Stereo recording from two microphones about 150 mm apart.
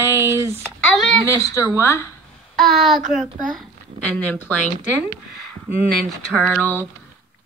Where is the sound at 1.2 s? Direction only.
20° left (ahead or behind).